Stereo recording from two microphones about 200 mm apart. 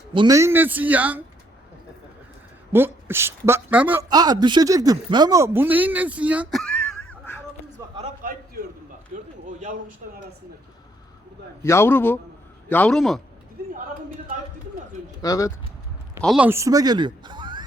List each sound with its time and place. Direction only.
0.1 s speech: 20° right (ahead or behind)
2.7 s speech: 10° right (ahead or behind)
4.1 s speech: 20° right (ahead or behind); by 6.8 s 5° left (ahead or behind)
7.1 s a sound: 10° left (ahead or behind)
9.1 s a sound: 40° right (ahead or behind)
11.6 s a man's voice: 10° left (ahead or behind)
15.2 s a man's voice: 15° left (ahead or behind)
16.2 s speech: 5° right (ahead or behind); by 17.6 s 20° right (ahead or behind)